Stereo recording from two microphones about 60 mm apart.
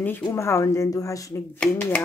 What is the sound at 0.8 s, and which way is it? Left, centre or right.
Speech, left.